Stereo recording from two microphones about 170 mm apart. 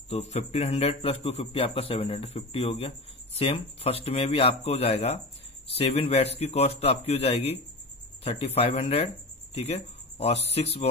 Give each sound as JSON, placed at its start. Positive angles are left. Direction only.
{"t": 0.1, "sound": "a man's voice", "side_deg": 40}